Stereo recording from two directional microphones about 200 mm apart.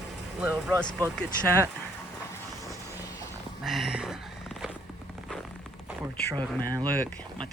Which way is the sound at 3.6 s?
Centre (ahead or behind).